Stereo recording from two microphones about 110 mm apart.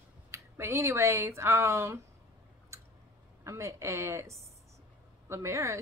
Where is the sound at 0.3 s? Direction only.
25° right (ahead or behind).